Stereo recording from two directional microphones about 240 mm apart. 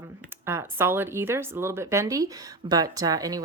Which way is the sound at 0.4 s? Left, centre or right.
Centre.